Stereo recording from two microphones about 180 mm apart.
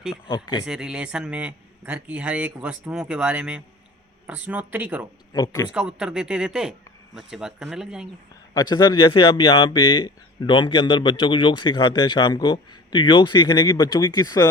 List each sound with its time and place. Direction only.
0.3 s speech: 25° left (ahead or behind)
0.6 s a man's voice: 5° right (ahead or behind)
5.3 s speech: 20° left (ahead or behind)
5.7 s a man's voice: 5° right (ahead or behind)
8.5 s speech: 20° left (ahead or behind)